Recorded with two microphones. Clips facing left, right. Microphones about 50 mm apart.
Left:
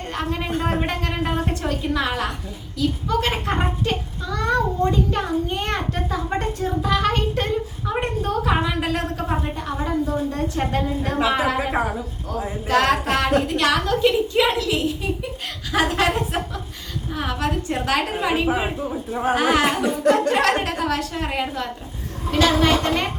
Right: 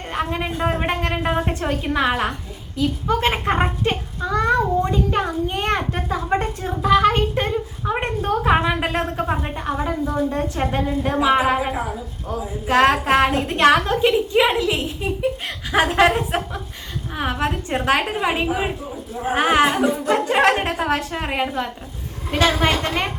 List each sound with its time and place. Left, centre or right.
0.1 s a woman's voice: centre
12.6 s a woman's voice: right